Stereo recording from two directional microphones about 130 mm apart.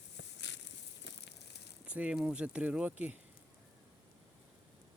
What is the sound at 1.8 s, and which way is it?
Speech, 10° right (ahead or behind).